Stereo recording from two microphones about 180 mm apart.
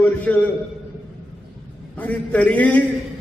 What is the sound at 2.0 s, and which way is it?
Speech, 10° left (ahead or behind).